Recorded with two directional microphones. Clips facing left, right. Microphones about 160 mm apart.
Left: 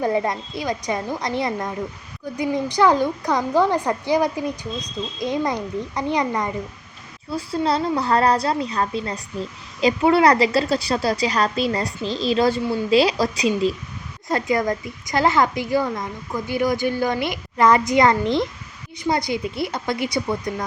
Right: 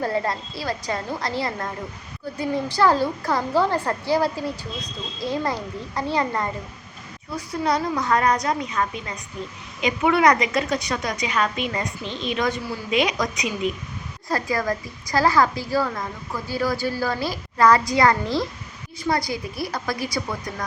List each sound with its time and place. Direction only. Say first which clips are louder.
0.0 s a woman's voice: left 3 dB; 20° left (ahead or behind)
7.3 s a woman's voice: left 2 dB; 30° left (ahead or behind)
14.3 s a woman's voice: left 3 dB; 20° left (ahead or behind)